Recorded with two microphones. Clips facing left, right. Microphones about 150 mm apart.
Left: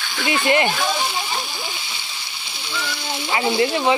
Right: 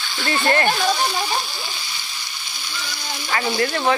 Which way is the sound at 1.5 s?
20° left (ahead or behind).